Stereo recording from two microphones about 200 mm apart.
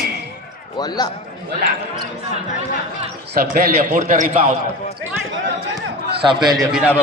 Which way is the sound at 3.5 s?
40° right (ahead or behind).